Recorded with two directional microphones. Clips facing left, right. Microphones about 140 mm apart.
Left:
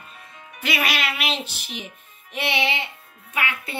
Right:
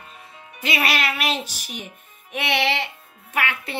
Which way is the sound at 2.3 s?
55° right (ahead or behind).